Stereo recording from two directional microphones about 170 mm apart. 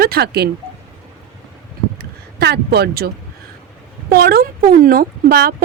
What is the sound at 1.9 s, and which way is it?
Speech, 70° right (ahead or behind).